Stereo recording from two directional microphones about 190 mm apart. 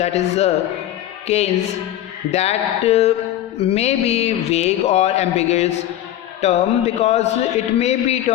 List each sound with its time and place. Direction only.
0.0 s speech: 35° left (ahead or behind)